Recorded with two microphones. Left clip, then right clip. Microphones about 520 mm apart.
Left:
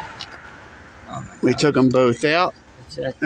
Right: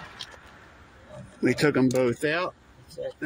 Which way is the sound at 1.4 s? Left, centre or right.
Right.